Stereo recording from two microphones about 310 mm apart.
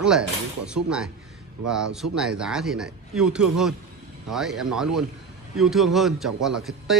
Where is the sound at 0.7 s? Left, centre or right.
Centre.